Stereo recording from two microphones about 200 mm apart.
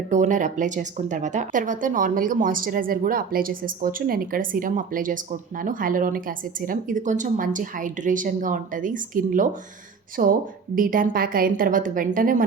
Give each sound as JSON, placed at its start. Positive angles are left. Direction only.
{"t": 0.1, "sound": "a woman's voice", "side_deg": -40}